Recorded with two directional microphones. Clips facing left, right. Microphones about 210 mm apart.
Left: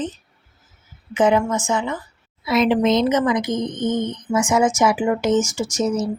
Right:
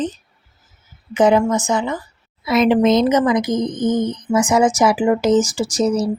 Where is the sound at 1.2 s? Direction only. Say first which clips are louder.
Right 3 dB; 35° right (ahead or behind).